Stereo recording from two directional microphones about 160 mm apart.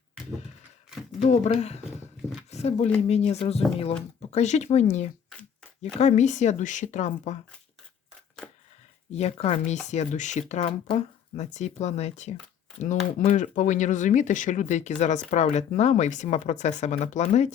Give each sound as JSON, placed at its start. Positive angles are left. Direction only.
{"t": 1.2, "sound": "speech", "side_deg": 45}
{"t": 9.1, "sound": "speech", "side_deg": 40}